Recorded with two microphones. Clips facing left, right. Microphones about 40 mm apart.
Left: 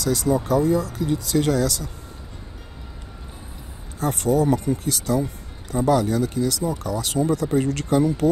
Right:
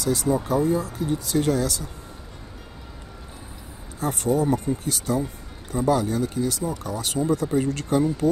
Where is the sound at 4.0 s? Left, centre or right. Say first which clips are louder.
Left 2 dB; left.